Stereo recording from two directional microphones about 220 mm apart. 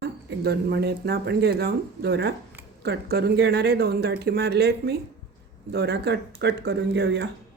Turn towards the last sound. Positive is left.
turn(degrees=-50)  # may be behind; listen again after turning